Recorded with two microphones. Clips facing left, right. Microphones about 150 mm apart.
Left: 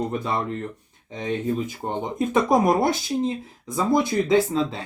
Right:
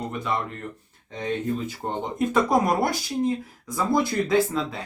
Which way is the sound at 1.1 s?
15° left (ahead or behind).